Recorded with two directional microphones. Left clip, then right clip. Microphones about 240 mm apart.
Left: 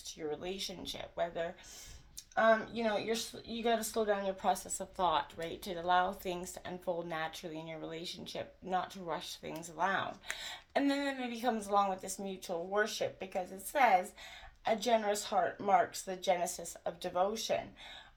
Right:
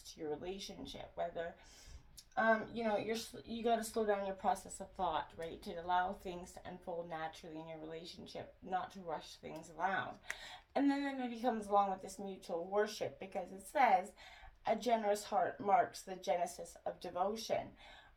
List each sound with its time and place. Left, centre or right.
0.3 s speech: left